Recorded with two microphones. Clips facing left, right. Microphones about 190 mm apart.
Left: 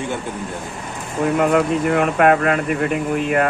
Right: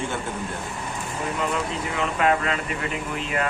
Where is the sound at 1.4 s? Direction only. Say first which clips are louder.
Left 11 dB; 60° left (ahead or behind).